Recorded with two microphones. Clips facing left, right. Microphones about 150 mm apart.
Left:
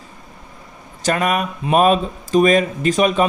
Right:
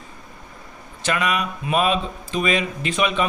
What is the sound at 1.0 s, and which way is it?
A man's voice, 45° left (ahead or behind).